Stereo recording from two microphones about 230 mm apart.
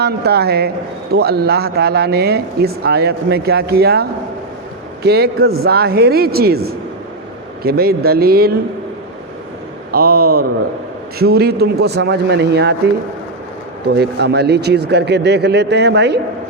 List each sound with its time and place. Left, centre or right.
0.0 s speech: right
5.0 s speech: right
9.9 s speech: right